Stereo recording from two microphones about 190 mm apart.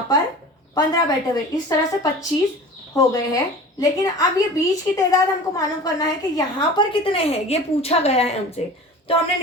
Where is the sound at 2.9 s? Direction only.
15° left (ahead or behind).